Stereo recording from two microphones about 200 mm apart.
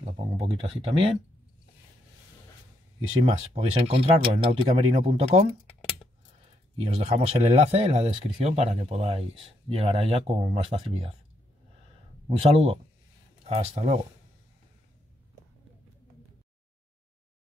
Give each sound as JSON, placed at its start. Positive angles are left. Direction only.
{"t": 0.7, "sound": "speech", "side_deg": -30}
{"t": 3.2, "sound": "speech", "side_deg": -30}
{"t": 6.8, "sound": "speech", "side_deg": -35}
{"t": 12.3, "sound": "speech", "side_deg": -30}